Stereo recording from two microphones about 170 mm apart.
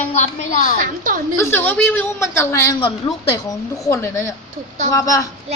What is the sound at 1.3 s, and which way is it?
A woman's voice, 15° left (ahead or behind).